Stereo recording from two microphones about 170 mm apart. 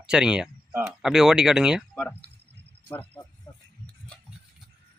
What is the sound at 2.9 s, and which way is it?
Cricket, 10° left (ahead or behind).